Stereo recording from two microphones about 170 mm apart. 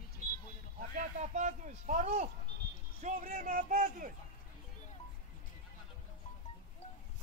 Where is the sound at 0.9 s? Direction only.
45° right (ahead or behind).